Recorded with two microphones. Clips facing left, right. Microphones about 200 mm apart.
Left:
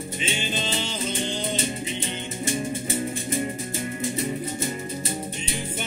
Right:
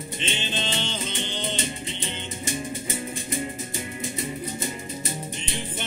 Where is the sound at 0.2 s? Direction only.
10° left (ahead or behind).